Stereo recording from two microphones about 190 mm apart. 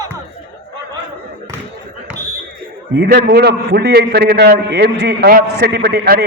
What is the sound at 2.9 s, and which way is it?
A man's voice, 60° right (ahead or behind).